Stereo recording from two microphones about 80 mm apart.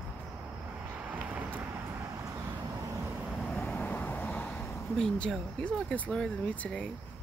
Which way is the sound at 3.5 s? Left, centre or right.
Centre.